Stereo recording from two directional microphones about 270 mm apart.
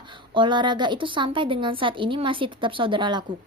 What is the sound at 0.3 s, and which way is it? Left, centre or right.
A woman's voice, centre.